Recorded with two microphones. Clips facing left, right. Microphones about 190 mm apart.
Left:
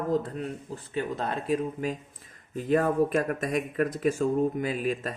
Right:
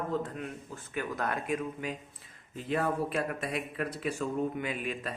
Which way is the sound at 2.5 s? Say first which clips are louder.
Left 7 dB; 45° left (ahead or behind).